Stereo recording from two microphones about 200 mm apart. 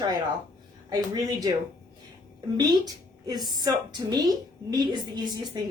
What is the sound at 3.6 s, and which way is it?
Speech, 20° right (ahead or behind).